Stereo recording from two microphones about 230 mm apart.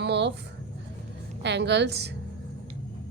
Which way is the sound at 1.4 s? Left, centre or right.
Right.